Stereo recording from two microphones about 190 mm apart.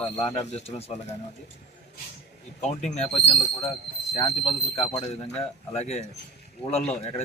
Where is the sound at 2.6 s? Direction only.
35° left (ahead or behind).